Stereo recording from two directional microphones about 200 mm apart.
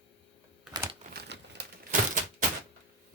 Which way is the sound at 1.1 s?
55° right (ahead or behind).